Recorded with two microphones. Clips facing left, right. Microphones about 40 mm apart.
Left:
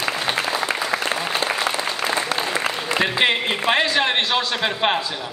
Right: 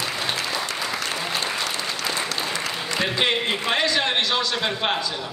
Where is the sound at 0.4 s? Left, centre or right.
Left.